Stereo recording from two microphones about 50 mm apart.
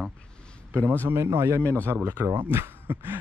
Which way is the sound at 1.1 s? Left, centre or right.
Right.